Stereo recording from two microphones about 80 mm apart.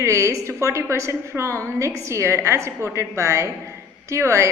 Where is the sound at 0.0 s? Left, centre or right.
Right.